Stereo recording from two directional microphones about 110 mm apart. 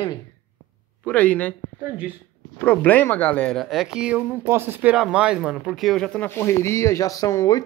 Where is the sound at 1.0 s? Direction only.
15° left (ahead or behind).